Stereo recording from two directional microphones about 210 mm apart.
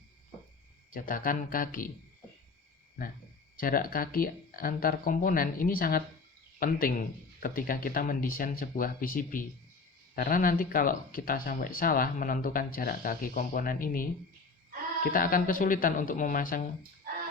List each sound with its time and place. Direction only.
0.9 s speech: 40° left (ahead or behind)
3.6 s speech: 45° left (ahead or behind)
15.1 s speech: 40° left (ahead or behind)